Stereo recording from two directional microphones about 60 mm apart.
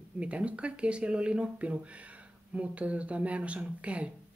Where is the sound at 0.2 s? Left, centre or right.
Right.